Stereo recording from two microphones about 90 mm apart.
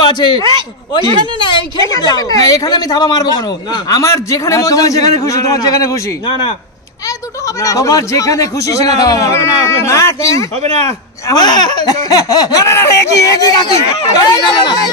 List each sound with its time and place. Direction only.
0.0 s a man's voice: 55° left (ahead or behind)
1.8 s speech: 40° left (ahead or behind)
4.0 s speech: 35° left (ahead or behind)
7.4 s speech: 35° left (ahead or behind)
11.2 s speech: 50° left (ahead or behind)